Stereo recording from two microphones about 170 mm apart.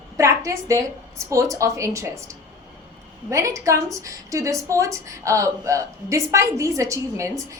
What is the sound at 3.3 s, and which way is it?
A woman's voice, 20° right (ahead or behind).